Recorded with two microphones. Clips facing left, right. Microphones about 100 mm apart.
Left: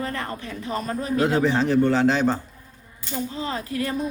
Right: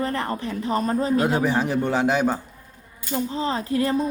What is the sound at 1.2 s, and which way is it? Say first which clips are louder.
A man's voice: left 1 dB; 15° right (ahead or behind).